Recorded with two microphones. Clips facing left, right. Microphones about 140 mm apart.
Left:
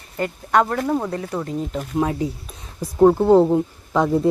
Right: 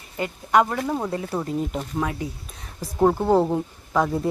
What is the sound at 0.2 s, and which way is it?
Speech, 5° right (ahead or behind).